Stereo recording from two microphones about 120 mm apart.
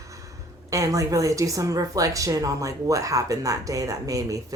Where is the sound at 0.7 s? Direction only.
25° right (ahead or behind).